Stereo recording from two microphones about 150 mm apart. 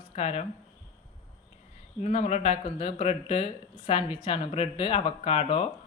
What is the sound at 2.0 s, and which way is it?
Speech, 50° left (ahead or behind).